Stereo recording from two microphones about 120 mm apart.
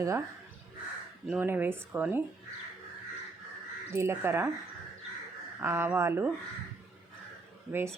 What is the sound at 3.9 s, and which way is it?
Speech, 20° right (ahead or behind).